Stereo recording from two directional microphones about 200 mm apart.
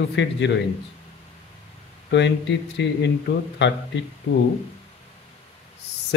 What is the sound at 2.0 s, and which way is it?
Speech, 60° left (ahead or behind).